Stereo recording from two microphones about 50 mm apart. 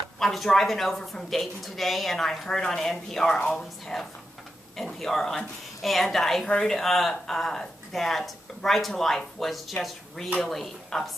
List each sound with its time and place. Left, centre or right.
0.2 s speech: centre